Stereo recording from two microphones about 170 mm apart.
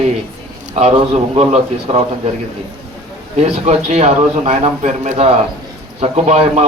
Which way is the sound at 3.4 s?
40° right (ahead or behind).